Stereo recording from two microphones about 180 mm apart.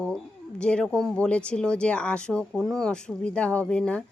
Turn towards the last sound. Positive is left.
turn(degrees=5)  # may be behind; listen again after turning